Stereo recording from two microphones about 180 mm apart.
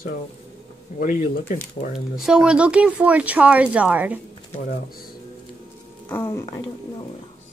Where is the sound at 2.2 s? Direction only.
5° right (ahead or behind).